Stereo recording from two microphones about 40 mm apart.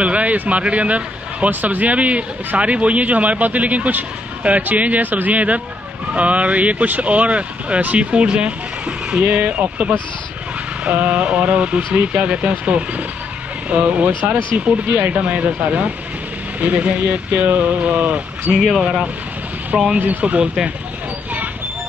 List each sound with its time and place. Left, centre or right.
0.0 s a man's voice: right
1.5 s a man's voice: right
9.2 s a man's voice: right
18.6 s speech: centre
20.0 s speech: right